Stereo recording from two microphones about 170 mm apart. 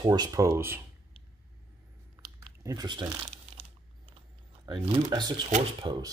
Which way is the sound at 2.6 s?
25° right (ahead or behind).